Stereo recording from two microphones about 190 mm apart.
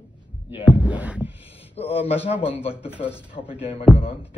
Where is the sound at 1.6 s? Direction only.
30° left (ahead or behind).